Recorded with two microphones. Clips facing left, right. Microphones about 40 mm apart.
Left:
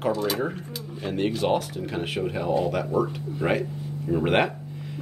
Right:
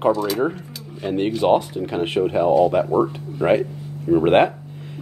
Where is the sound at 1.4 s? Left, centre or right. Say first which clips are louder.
Right 7 dB; right.